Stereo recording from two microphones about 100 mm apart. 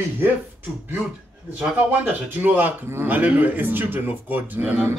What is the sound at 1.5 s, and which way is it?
Speech, 15° right (ahead or behind).